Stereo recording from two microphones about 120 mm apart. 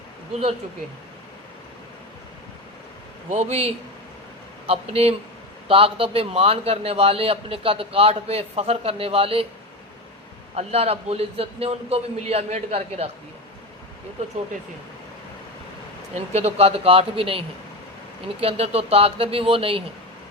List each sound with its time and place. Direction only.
3.2 s a man's voice: 65° right (ahead or behind)
10.5 s a man's voice: 60° right (ahead or behind)
16.1 s a man's voice: 60° right (ahead or behind)